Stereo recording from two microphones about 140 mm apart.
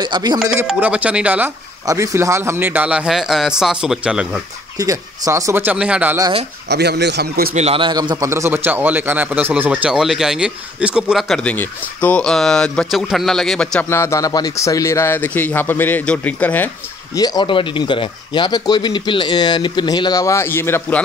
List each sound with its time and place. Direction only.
0.0 s a man's voice: 30° right (ahead or behind)
0.7 s speech: 10° right (ahead or behind)
1.9 s speech: 20° right (ahead or behind)
4.7 s speech: 25° right (ahead or behind); by 6.1 s 10° right (ahead or behind)
7.5 s a man's voice: 50° right (ahead or behind)
7.8 s a man's voice: 30° right (ahead or behind)
8.3 s speech: 20° right (ahead or behind); by 13.8 s 5° left (ahead or behind)
13.8 s speech: 20° left (ahead or behind)
17.1 s speech: 25° left (ahead or behind)